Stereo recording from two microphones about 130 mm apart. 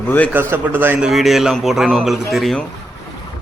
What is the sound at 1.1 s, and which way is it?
A man's voice, centre (ahead or behind).